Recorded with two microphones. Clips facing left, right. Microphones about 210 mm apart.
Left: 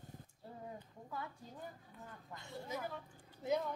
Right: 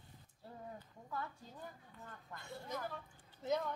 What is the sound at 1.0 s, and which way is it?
Speech, 15° left (ahead or behind).